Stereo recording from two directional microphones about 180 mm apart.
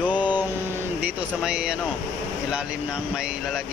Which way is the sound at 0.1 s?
25° left (ahead or behind).